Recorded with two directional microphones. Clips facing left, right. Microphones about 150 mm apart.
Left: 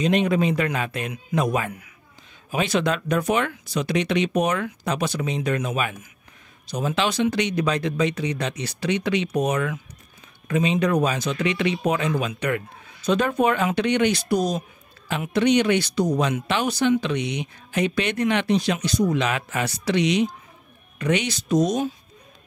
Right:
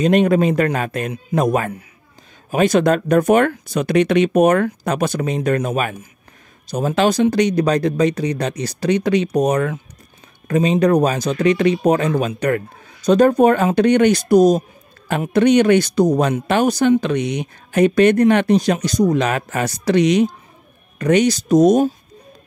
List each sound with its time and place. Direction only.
0.0 s speech: 50° right (ahead or behind)